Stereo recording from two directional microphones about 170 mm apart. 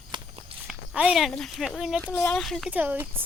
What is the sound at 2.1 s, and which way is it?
Speech, 10° left (ahead or behind).